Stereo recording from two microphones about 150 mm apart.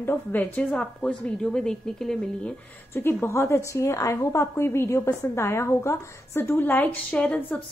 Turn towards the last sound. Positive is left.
turn(degrees=10)  # may be behind; listen again after turning